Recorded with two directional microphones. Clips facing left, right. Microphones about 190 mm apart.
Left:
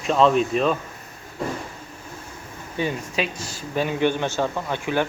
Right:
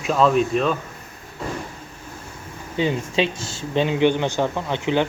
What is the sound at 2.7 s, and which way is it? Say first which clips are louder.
A man's voice: right 4 dB; 25° right (ahead or behind).